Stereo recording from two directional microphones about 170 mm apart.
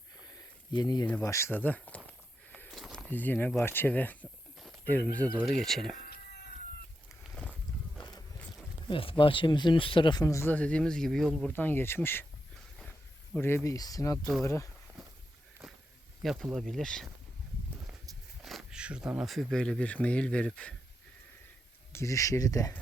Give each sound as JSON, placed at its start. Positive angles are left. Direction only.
{"t": 0.3, "sound": "a sound", "side_deg": 25}
{"t": 1.2, "sound": "speech", "side_deg": 15}
{"t": 2.5, "sound": "a sound", "side_deg": 5}
{"t": 3.1, "sound": "speech", "side_deg": 10}
{"t": 4.5, "sound": "a sound", "side_deg": 0}
{"t": 5.5, "sound": "speech", "side_deg": 0}
{"t": 6.0, "sound": "cat", "side_deg": 70}
{"t": 8.9, "sound": "speech", "side_deg": 30}
{"t": 13.3, "sound": "speech", "side_deg": 15}
{"t": 15.6, "sound": "walk", "side_deg": 0}
{"t": 16.2, "sound": "speech", "side_deg": 0}
{"t": 18.4, "sound": "speech", "side_deg": 0}
{"t": 21.9, "sound": "speech", "side_deg": 20}